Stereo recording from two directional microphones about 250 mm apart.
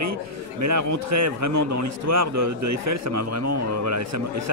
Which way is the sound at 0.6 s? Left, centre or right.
Right.